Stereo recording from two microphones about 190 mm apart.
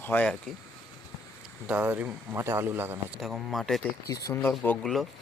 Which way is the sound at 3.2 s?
Centre (ahead or behind).